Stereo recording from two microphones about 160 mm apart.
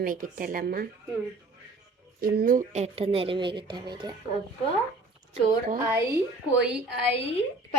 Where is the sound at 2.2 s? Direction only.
70° right (ahead or behind); by 4.1 s 25° right (ahead or behind).